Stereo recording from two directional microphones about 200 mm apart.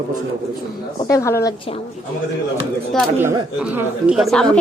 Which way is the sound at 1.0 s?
15° left (ahead or behind).